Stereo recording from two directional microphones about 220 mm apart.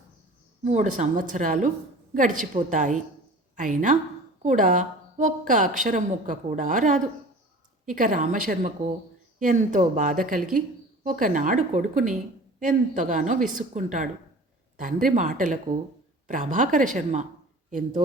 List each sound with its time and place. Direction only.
0.6 s a woman's voice: 35° right (ahead or behind)